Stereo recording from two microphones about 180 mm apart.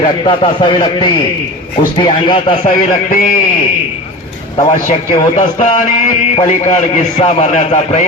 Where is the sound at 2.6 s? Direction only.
45° left (ahead or behind).